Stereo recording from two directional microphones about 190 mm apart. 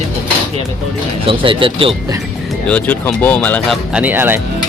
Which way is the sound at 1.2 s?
30° right (ahead or behind).